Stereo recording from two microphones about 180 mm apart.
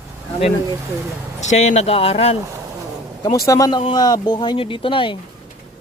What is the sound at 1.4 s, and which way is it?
Speech, 40° left (ahead or behind).